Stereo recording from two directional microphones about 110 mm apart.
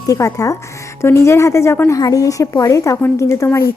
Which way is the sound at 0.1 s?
30° left (ahead or behind).